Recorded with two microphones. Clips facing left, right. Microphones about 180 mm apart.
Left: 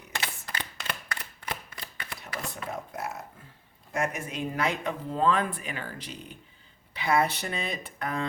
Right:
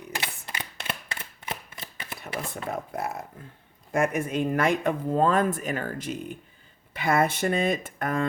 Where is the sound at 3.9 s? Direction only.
55° right (ahead or behind).